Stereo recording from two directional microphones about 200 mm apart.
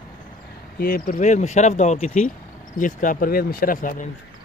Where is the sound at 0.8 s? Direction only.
45° left (ahead or behind).